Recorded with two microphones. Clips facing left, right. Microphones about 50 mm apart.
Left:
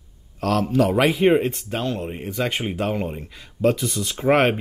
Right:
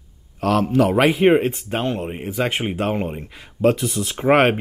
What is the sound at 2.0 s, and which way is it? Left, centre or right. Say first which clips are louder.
Speech: right 2 dB; centre.